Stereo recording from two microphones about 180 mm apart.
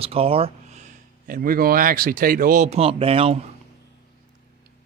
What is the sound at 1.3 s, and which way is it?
Speech, 50° right (ahead or behind).